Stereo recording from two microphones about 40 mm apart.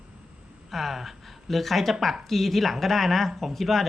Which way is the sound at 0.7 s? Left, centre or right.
Centre.